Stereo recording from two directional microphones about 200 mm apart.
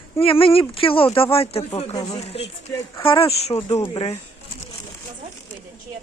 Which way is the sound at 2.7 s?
15° left (ahead or behind).